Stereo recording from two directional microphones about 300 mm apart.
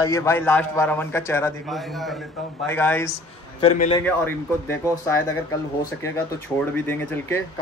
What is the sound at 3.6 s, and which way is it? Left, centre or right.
Speech, centre.